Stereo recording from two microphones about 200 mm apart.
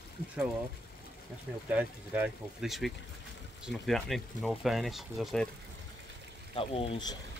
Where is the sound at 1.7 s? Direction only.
5° right (ahead or behind).